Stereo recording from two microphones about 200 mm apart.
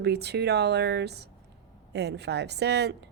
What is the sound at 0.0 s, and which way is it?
A woman's voice, 55° right (ahead or behind).